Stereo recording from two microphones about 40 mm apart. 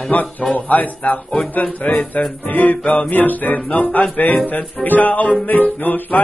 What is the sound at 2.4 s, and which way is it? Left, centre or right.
Music, left.